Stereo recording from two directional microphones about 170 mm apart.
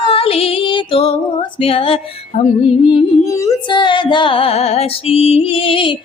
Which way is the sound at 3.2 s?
20° left (ahead or behind).